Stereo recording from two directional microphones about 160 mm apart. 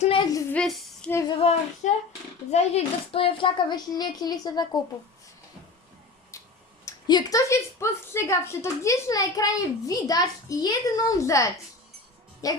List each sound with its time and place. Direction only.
0.0 s a sound: 35° left (ahead or behind)
0.5 s a sound: 5° left (ahead or behind)
1.3 s child singing: 40° left (ahead or behind)
2.5 s a woman's voice: 40° left (ahead or behind); by 4.8 s 25° left (ahead or behind)
6.3 s tick-tock: 20° left (ahead or behind)
6.8 s a woman's voice: 25° left (ahead or behind)